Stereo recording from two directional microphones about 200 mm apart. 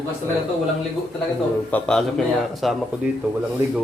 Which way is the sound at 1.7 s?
5° left (ahead or behind).